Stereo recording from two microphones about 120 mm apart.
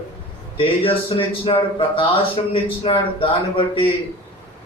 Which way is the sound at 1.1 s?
45° left (ahead or behind).